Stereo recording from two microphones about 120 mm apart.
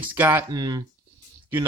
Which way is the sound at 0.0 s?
15° right (ahead or behind).